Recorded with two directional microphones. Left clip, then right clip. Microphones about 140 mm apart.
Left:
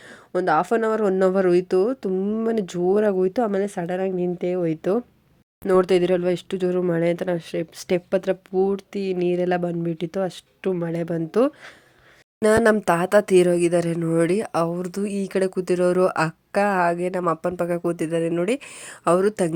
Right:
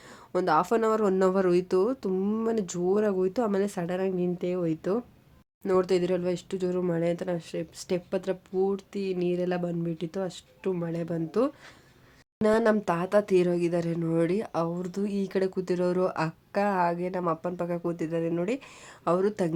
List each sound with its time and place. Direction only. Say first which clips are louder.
0.1 s speech: left 4 dB; 30° left (ahead or behind)